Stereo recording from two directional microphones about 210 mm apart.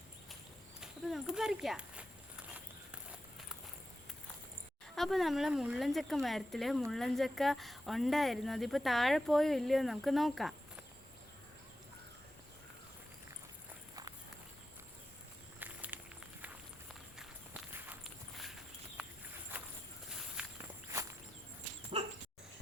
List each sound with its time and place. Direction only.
0.8 s speech: 5° right (ahead or behind)
4.9 s speech: centre (ahead or behind)
15.6 s walk: 10° right (ahead or behind)
20.1 s walk: 5° right (ahead or behind)
21.9 s dog: 30° right (ahead or behind)